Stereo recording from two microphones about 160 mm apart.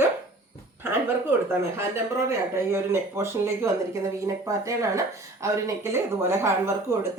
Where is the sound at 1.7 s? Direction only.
15° right (ahead or behind).